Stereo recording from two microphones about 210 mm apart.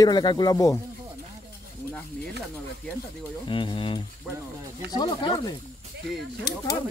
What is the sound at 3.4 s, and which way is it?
Speech, 25° left (ahead or behind).